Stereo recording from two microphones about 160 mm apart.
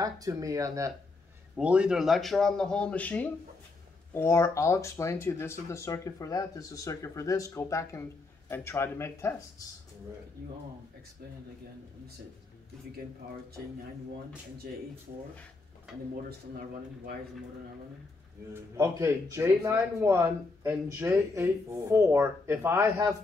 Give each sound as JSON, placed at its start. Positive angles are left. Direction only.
{"t": 0.0, "sound": "speech", "side_deg": -20}
{"t": 1.6, "sound": "a man's voice", "side_deg": -5}
{"t": 18.5, "sound": "speech", "side_deg": -15}